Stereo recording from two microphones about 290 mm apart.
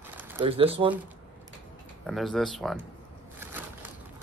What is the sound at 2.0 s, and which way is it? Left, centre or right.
Speech, centre.